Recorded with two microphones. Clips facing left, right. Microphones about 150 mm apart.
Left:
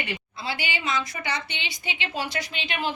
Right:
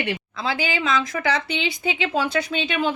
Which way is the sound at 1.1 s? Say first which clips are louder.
Right 9 dB; 90° right.